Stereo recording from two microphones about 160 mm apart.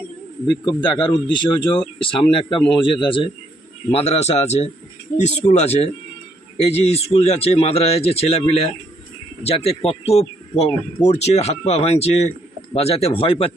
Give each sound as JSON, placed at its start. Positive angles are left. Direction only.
{"t": 0.6, "sound": "speech", "side_deg": 30}